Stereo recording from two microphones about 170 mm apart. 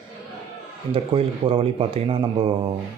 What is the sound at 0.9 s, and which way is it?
Speech, 35° right (ahead or behind).